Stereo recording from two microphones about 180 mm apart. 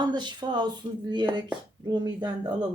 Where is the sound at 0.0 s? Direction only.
25° right (ahead or behind).